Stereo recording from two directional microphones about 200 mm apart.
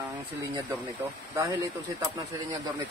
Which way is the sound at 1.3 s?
15° right (ahead or behind).